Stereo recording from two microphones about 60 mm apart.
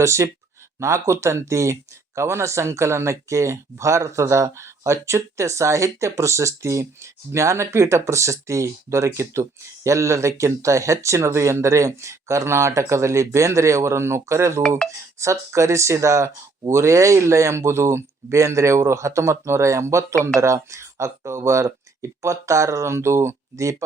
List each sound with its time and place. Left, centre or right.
0.0 s speech: right